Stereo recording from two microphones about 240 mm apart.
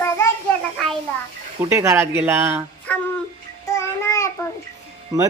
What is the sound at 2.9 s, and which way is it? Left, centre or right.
Music, centre.